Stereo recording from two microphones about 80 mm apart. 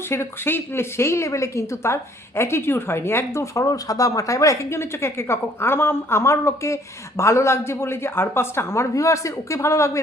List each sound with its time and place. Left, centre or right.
0.1 s a woman's voice: left